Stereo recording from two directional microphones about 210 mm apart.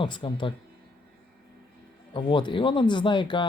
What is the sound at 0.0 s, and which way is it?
Speech, 25° left (ahead or behind).